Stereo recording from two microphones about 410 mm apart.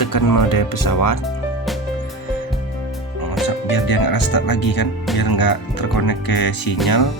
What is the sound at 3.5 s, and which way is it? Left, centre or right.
Speech, left.